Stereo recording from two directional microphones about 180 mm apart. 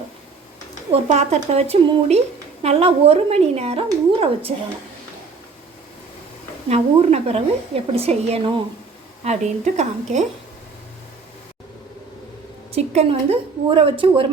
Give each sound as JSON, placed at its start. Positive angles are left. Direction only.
{"t": 0.9, "sound": "a woman's voice", "side_deg": -40}
{"t": 6.7, "sound": "a woman's voice", "side_deg": -35}
{"t": 12.7, "sound": "a woman's voice", "side_deg": -35}